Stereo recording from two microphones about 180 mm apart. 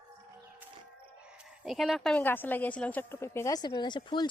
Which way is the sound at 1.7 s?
Centre (ahead or behind).